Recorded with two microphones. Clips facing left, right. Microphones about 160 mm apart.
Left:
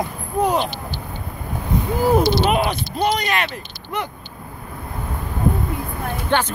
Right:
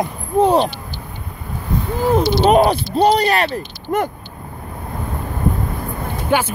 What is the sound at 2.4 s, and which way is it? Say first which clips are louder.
Speech: right 7 dB; 35° right (ahead or behind).